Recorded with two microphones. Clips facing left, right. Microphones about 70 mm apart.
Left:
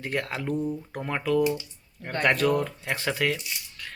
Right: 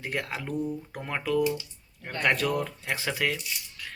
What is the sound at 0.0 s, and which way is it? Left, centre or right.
Speech, centre.